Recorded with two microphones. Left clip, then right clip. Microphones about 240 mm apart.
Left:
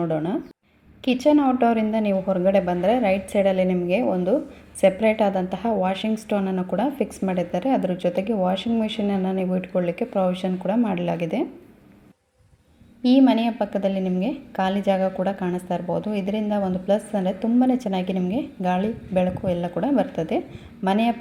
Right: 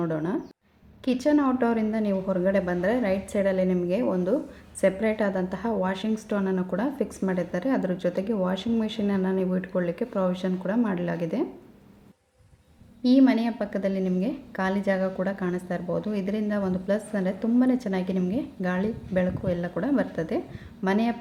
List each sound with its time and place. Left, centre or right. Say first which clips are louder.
0.0 s a woman's voice: left 4 dB; centre
13.0 s a woman's voice: left 3 dB; centre